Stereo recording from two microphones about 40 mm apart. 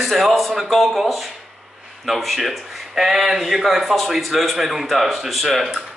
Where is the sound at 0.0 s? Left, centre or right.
Centre.